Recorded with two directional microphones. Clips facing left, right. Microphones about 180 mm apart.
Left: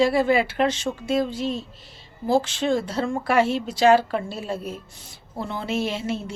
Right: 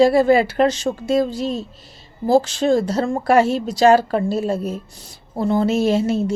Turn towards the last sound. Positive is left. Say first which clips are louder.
# right 9 dB
turn(degrees=-40)  # may be behind; listen again after turning